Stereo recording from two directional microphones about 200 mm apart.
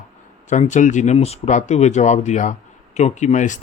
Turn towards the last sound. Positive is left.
turn(degrees=40)  # may be behind; listen again after turning